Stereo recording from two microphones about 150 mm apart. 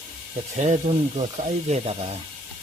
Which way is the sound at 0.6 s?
45° right (ahead or behind).